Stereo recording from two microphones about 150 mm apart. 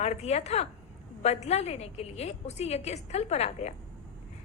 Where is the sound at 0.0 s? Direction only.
45° left (ahead or behind).